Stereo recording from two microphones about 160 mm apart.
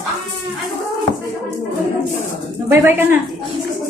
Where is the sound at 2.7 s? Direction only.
15° right (ahead or behind).